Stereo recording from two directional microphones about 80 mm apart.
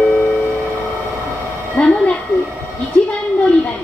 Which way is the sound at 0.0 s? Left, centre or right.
Centre.